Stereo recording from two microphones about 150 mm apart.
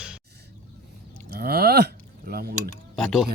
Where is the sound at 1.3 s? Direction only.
90° right.